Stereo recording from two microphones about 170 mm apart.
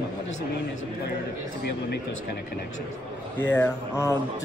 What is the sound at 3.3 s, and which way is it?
Speech, 10° left (ahead or behind).